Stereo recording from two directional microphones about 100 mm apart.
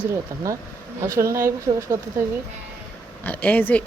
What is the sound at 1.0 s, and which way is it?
Speech, 30° right (ahead or behind).